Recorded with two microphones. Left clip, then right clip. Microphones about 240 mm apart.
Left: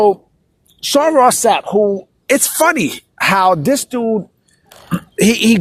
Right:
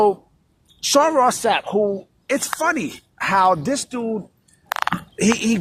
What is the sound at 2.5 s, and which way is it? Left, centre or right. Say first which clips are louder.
Speech: left 8 dB; left.